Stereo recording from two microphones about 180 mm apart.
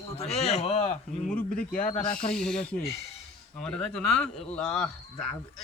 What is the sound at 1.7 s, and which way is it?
Speech, 45° left (ahead or behind).